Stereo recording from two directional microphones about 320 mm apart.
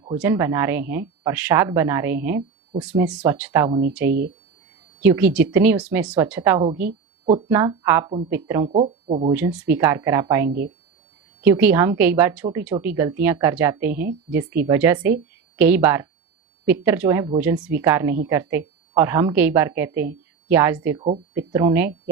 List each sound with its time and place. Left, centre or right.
0.1 s speech: centre
8.7 s speech: centre
9.3 s speech: centre